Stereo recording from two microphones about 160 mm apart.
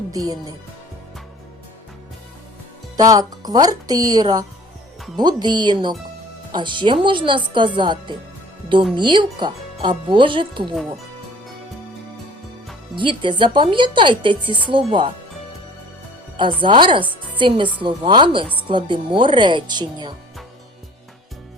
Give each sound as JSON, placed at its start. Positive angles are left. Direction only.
{"t": 0.1, "sound": "speech", "side_deg": -20}
{"t": 3.0, "sound": "speech", "side_deg": -20}
{"t": 13.0, "sound": "speech", "side_deg": -30}
{"t": 16.4, "sound": "speech", "side_deg": -30}